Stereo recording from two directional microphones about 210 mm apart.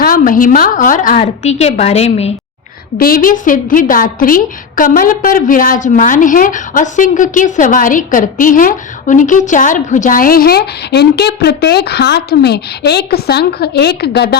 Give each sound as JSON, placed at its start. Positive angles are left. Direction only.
{"t": 0.0, "sound": "a woman's voice", "side_deg": 40}
{"t": 3.0, "sound": "a woman's voice", "side_deg": 40}